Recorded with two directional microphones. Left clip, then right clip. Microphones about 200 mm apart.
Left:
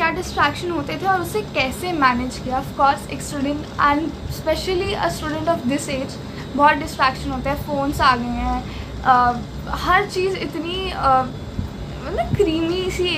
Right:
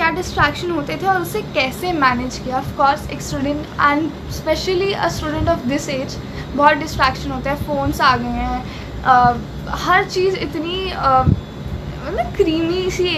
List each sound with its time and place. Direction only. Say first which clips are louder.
0.0 s a woman's voice: right 2 dB; 5° left (ahead or behind)
12.4 s a woman's voice: right 2 dB; 5° left (ahead or behind)